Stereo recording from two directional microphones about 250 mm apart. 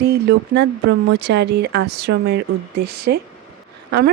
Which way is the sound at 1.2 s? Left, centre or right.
Right.